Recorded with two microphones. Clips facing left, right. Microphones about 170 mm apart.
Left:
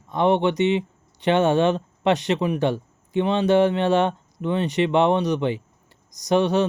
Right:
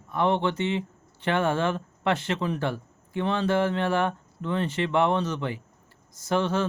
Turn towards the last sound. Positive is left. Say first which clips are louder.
# left 6 dB
turn(degrees=20)  # may be behind; listen again after turning